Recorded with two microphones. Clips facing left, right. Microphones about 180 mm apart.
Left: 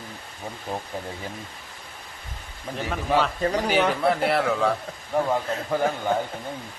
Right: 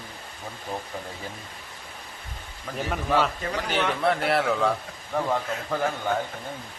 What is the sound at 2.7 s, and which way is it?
Speech, 20° left (ahead or behind).